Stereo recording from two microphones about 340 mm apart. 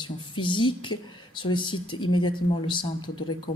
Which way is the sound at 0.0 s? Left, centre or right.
Centre.